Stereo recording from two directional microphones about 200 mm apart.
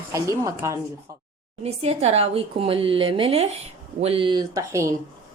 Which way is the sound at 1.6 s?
30° right (ahead or behind).